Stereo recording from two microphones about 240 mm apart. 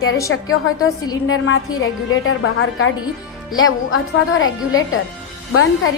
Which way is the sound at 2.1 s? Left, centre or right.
Left.